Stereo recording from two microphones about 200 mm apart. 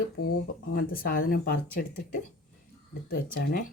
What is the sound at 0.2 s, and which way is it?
Speech, 45° left (ahead or behind).